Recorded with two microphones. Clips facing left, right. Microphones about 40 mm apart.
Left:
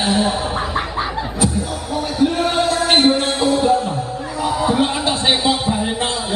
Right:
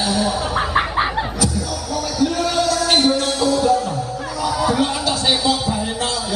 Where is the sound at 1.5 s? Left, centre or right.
Left.